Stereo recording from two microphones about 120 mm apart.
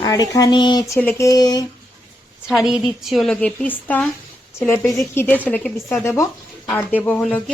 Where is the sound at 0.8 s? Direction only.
20° left (ahead or behind).